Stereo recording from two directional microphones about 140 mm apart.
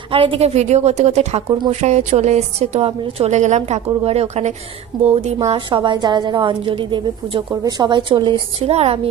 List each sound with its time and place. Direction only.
0.1 s a woman's voice: 40° right (ahead or behind)
4.9 s speech: centre (ahead or behind)
5.5 s a woman's voice: 35° right (ahead or behind)
8.5 s a woman's voice: 45° right (ahead or behind)